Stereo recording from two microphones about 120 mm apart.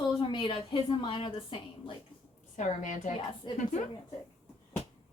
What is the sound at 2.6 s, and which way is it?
Speech, 90° left.